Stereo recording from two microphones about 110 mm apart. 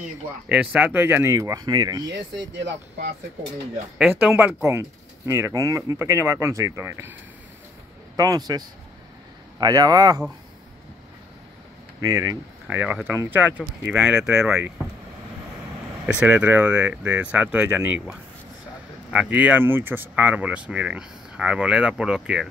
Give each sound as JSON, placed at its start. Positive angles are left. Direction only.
{"t": 0.5, "sound": "speech", "side_deg": -10}
{"t": 1.3, "sound": "speech", "side_deg": -30}
{"t": 4.1, "sound": "speech", "side_deg": -20}
{"t": 8.2, "sound": "speech", "side_deg": -35}
{"t": 12.0, "sound": "speech", "side_deg": -30}
{"t": 12.6, "sound": "speech", "side_deg": -15}
{"t": 16.1, "sound": "speech", "side_deg": -10}